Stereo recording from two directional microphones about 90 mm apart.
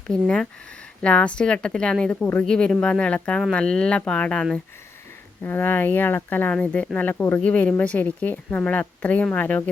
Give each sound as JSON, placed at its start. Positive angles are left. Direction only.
{"t": 0.1, "sound": "speech", "side_deg": 10}
{"t": 5.4, "sound": "speech", "side_deg": 20}